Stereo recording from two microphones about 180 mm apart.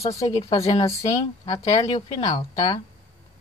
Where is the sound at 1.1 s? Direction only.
30° left (ahead or behind).